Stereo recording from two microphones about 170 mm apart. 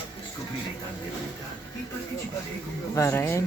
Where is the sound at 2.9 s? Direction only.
15° left (ahead or behind).